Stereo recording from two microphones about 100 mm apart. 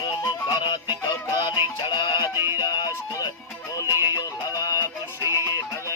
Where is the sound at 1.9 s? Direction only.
50° left (ahead or behind).